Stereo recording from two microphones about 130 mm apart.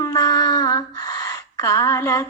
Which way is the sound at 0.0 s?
25° left (ahead or behind).